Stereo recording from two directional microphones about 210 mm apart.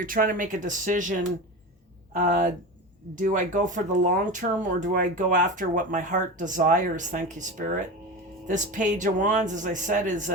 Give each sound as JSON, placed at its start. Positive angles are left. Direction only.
{"t": 0.0, "sound": "speech", "side_deg": -40}
{"t": 2.1, "sound": "speech", "side_deg": -40}